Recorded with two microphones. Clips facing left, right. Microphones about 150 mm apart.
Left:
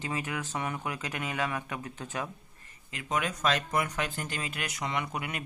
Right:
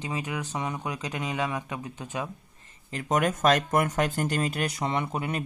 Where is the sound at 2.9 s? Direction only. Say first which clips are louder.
Right 6 dB; 40° right (ahead or behind).